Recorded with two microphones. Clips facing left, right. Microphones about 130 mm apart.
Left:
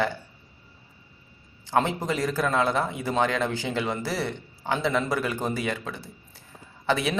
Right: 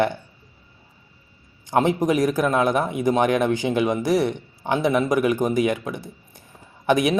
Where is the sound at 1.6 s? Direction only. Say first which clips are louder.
Right 5 dB; 15° right (ahead or behind).